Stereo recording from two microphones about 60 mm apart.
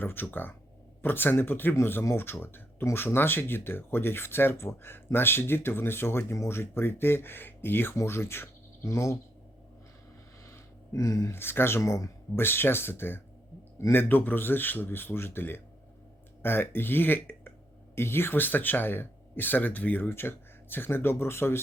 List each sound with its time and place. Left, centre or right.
0.0 s speech: left
7.9 s speech: left
10.4 s a sound: left
11.3 s speech: left
11.8 s speech: left
12.4 s speech: left
20.1 s speech: left